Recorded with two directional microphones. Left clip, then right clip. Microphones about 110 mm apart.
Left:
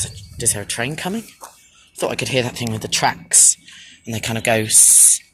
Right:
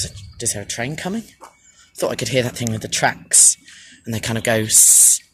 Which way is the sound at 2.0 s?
55° right (ahead or behind).